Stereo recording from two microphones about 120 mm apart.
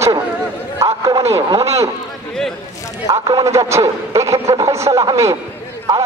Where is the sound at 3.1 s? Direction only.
30° right (ahead or behind).